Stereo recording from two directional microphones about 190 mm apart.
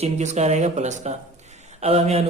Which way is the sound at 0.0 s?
35° right (ahead or behind).